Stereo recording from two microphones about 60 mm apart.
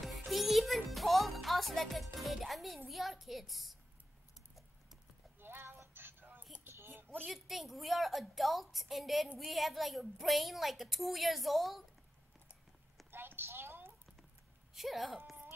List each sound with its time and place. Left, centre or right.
0.0 s music: centre
2.1 s a woman's voice: centre
5.4 s a sound: right
7.2 s a woman's voice: centre
13.1 s a sound: right
14.7 s a woman's voice: centre